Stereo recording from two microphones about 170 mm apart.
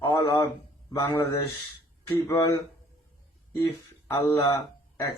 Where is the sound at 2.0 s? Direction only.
20° left (ahead or behind).